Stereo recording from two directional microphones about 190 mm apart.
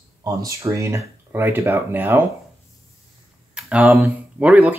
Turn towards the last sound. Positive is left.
turn(degrees=-5)  # may be behind; listen again after turning